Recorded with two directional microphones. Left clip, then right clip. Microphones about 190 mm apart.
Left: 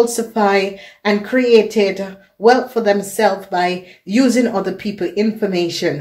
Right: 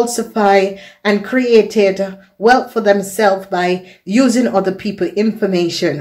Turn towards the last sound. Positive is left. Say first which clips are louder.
# right 2 dB
turn(degrees=-25)  # may be behind; listen again after turning